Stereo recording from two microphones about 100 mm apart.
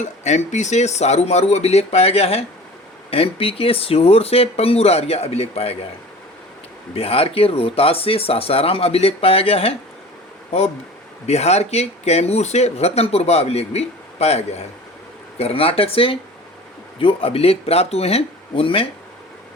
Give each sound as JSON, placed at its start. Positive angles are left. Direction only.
{"t": 0.9, "sound": "speech", "side_deg": 90}
{"t": 3.1, "sound": "speech", "side_deg": 70}
{"t": 6.9, "sound": "speech", "side_deg": 75}
{"t": 11.3, "sound": "speech", "side_deg": 90}
{"t": 15.4, "sound": "speech", "side_deg": 75}